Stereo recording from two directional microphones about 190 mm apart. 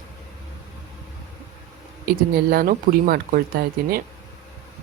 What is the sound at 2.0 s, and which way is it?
Speech, 50° right (ahead or behind).